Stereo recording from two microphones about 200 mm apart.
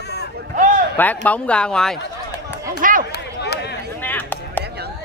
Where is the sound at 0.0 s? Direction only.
55° left (ahead or behind).